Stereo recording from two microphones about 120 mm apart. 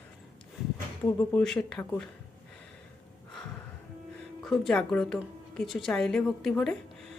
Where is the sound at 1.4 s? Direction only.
5° left (ahead or behind).